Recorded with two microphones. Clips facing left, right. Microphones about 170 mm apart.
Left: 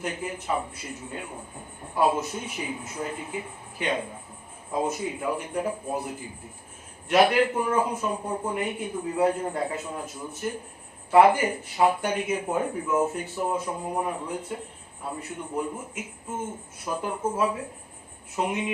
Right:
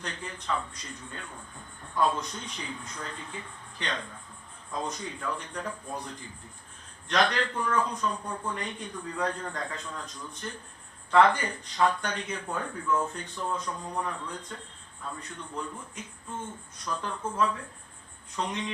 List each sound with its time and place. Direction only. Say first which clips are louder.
0.1 s speech: left 1 dB; 10° left (ahead or behind)
8.2 s speech: left 6 dB; 25° left (ahead or behind)
8.4 s speech: left 7 dB; 10° left (ahead or behind)
9.0 s speech: left 8 dB; 25° left (ahead or behind)
9.2 s speech: left 8 dB; 10° left (ahead or behind)
12.5 s speech: left 3 dB; 20° left (ahead or behind)
13.1 s a man's voice: left 6 dB; 5° left (ahead or behind)
15.7 s speech: left 6 dB; 25° left (ahead or behind)
16.8 s speech: left 5 dB; 10° left (ahead or behind)